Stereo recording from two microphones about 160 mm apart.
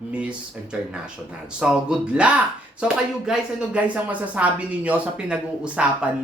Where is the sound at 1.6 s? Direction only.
5° right (ahead or behind).